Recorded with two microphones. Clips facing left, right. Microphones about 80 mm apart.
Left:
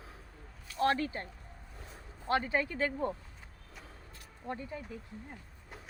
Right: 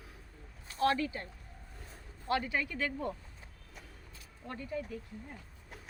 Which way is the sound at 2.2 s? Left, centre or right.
Left.